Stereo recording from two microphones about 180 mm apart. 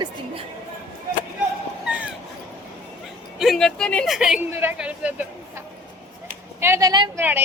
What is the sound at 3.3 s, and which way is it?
A woman's voice, centre (ahead or behind).